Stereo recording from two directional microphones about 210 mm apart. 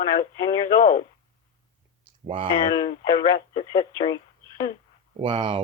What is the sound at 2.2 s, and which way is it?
Speech, 25° right (ahead or behind).